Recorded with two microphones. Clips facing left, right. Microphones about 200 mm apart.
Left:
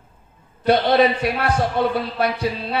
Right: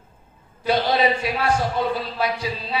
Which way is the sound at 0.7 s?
60° left (ahead or behind).